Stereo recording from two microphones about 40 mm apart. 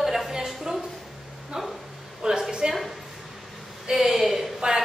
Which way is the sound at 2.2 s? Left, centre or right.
Centre.